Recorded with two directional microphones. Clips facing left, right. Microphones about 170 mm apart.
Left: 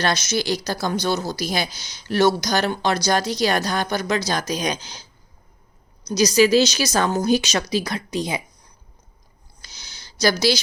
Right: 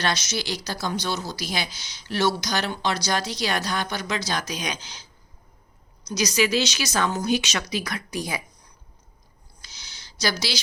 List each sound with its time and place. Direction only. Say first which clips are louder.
0.0 s speech: left 5 dB; 50° left (ahead or behind)
6.1 s speech: left 7 dB; 35° left (ahead or behind)
9.6 s a sound: left 3 dB; 45° left (ahead or behind)